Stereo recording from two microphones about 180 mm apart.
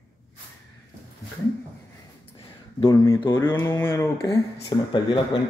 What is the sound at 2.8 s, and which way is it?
Speech, 20° left (ahead or behind).